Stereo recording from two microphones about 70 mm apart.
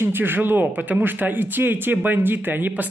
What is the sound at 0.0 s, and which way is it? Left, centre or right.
A man's voice, right.